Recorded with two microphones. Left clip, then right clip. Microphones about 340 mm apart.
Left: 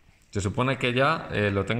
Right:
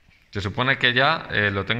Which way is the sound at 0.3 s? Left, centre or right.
Centre.